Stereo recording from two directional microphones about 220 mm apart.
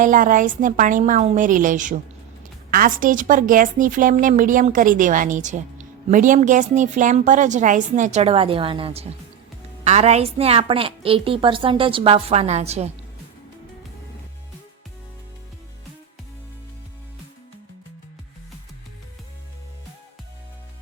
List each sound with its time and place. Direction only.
0.0 s a woman's voice: 35° right (ahead or behind)